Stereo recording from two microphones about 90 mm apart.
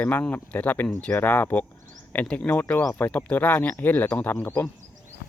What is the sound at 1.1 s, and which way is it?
Speech, 20° left (ahead or behind).